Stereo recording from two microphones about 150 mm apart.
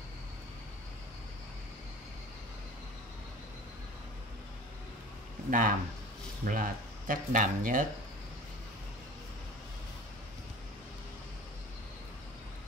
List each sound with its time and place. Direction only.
5.5 s speech: 65° right (ahead or behind)